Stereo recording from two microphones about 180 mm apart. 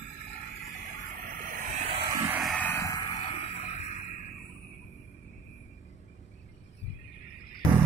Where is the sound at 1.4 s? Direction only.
50° right (ahead or behind).